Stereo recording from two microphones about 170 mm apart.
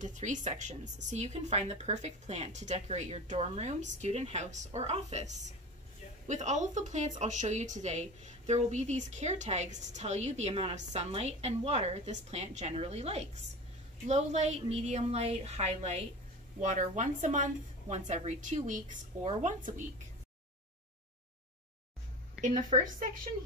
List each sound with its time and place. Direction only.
0.0 s a woman's voice: 45° right (ahead or behind)
22.4 s a woman's voice: 45° right (ahead or behind)